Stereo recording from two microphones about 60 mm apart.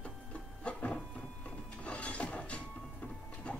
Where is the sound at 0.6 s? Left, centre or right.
Left.